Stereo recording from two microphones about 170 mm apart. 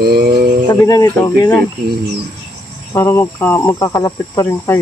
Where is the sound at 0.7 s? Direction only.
20° left (ahead or behind).